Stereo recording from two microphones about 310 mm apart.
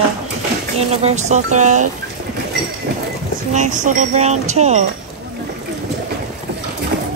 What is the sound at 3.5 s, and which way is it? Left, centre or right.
Speech, right.